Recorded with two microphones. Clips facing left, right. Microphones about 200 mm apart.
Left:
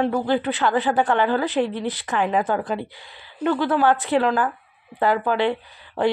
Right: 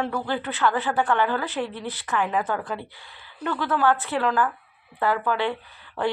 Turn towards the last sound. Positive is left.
turn(degrees=35)  # may be behind; listen again after turning